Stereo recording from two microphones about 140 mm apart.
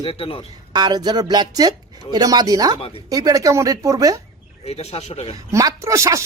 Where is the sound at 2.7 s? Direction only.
45° left (ahead or behind).